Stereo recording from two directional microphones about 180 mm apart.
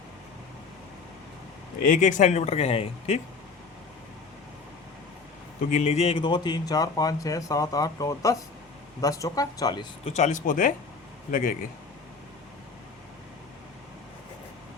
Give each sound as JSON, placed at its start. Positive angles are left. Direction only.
{"t": 1.8, "sound": "speech", "side_deg": 45}
{"t": 5.7, "sound": "speech", "side_deg": 40}
{"t": 10.0, "sound": "a man's voice", "side_deg": 40}